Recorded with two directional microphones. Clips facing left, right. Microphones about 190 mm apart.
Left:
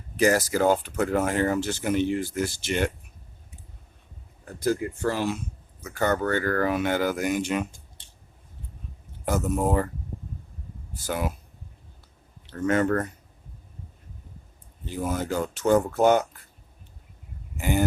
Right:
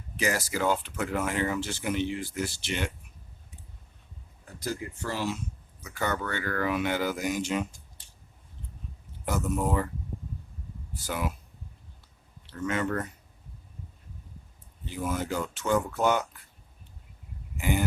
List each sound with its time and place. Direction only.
0.2 s speech: 40° left (ahead or behind)
4.6 s speech: 55° left (ahead or behind)
9.2 s speech: 45° left (ahead or behind)
11.0 s speech: 45° left (ahead or behind)
12.5 s speech: 45° left (ahead or behind)
14.8 s speech: 45° left (ahead or behind)
17.6 s speech: 45° left (ahead or behind)